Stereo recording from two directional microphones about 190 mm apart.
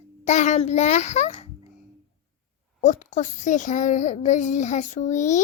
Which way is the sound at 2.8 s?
40° left (ahead or behind).